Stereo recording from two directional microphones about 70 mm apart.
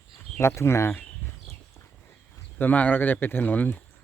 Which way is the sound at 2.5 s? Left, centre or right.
Left.